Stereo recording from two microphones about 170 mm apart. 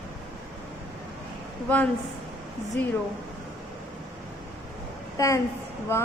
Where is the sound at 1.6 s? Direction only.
10° left (ahead or behind).